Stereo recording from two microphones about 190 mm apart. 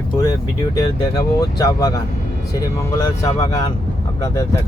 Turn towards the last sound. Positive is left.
turn(degrees=15)  # may be behind; listen again after turning